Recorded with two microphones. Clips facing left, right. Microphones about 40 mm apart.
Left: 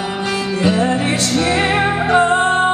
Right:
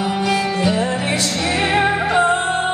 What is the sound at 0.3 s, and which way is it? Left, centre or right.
Music, right.